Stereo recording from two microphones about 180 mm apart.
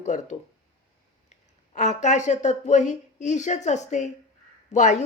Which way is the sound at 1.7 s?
40° left (ahead or behind).